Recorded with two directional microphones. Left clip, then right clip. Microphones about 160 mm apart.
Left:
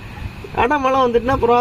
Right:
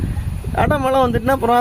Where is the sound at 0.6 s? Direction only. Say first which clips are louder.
Left 1 dB; 55° right (ahead or behind).